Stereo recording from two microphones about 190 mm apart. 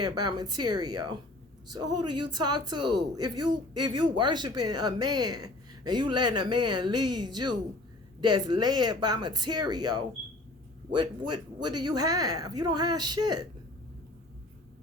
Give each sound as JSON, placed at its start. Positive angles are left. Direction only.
{"t": 0.0, "sound": "speech", "side_deg": -20}